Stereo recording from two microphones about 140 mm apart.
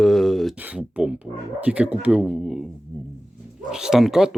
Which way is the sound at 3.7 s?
5° right (ahead or behind).